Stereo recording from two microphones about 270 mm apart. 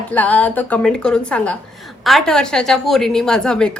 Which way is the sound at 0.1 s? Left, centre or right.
Centre.